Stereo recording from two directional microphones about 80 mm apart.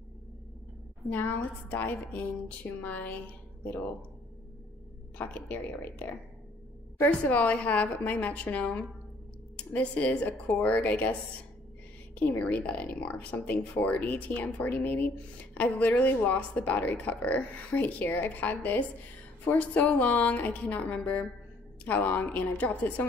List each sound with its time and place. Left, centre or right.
1.1 s speech: left
5.1 s a woman's voice: centre
10.2 s speech: left
10.6 s speech: centre
12.2 s speech: left